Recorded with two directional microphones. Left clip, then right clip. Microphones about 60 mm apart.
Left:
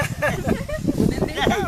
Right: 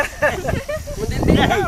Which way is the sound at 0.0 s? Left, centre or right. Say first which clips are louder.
Right 5 dB; left.